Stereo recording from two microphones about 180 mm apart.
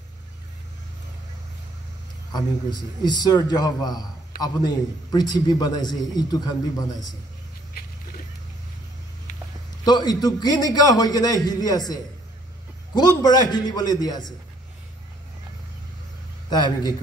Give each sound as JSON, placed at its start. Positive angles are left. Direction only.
{"t": 2.3, "sound": "a man's voice", "side_deg": 25}
{"t": 7.8, "sound": "a sound", "side_deg": 55}
{"t": 9.8, "sound": "a man's voice", "side_deg": 20}
{"t": 16.4, "sound": "a man's voice", "side_deg": 25}